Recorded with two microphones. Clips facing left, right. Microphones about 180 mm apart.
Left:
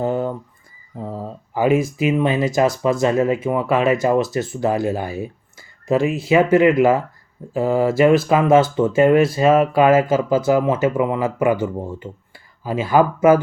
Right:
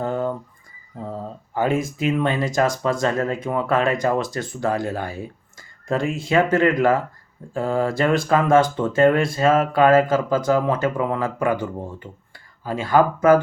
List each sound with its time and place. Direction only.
0.0 s a sound: 20° left (ahead or behind)
1.5 s speech: 10° left (ahead or behind)
12.6 s speech: 10° left (ahead or behind)